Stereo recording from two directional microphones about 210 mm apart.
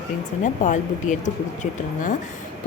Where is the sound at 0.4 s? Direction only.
35° left (ahead or behind).